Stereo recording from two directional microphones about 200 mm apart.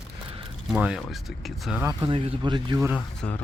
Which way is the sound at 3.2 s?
5° left (ahead or behind).